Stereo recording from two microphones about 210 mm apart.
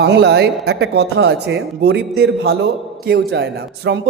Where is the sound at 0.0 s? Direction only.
50° right (ahead or behind).